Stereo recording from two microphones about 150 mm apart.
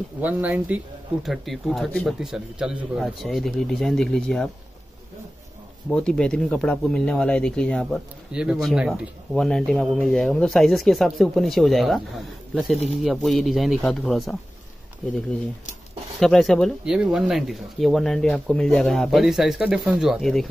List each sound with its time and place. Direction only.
0.2 s speech: 10° right (ahead or behind)
5.9 s speech: 5° left (ahead or behind)
13.0 s speech: centre (ahead or behind)
16.2 s speech: centre (ahead or behind)